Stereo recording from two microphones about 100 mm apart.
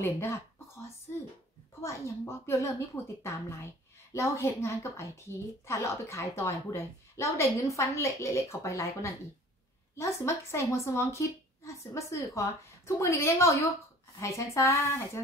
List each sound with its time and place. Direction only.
0.0 s speech: 25° left (ahead or behind)
1.8 s speech: 30° left (ahead or behind)